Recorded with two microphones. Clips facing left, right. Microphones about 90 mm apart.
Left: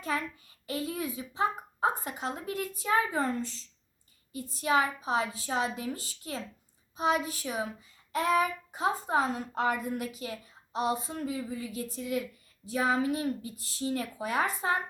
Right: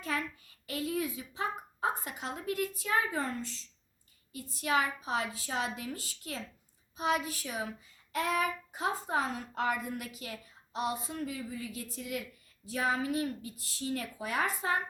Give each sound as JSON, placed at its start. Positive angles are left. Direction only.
{"t": 0.0, "sound": "a woman's voice", "side_deg": 30}